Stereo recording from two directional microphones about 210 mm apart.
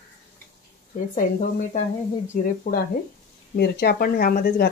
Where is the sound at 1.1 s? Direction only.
40° left (ahead or behind).